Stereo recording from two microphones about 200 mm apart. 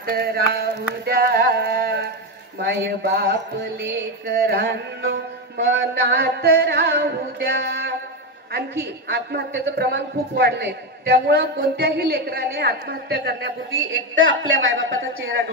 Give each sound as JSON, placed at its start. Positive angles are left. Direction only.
{"t": 0.1, "sound": "a sound", "side_deg": -50}
{"t": 2.6, "sound": "a woman's voice", "side_deg": -55}
{"t": 13.9, "sound": "a woman's voice", "side_deg": -70}